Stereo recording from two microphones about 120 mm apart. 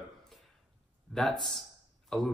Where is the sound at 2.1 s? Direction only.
5° left (ahead or behind).